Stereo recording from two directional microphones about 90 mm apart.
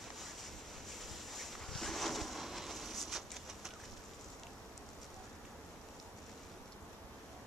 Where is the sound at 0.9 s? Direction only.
Centre (ahead or behind).